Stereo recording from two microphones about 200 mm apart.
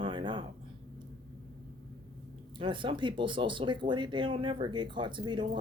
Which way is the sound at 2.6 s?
25° right (ahead or behind).